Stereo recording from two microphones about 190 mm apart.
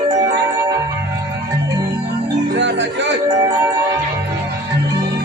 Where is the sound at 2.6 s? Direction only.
70° right (ahead or behind).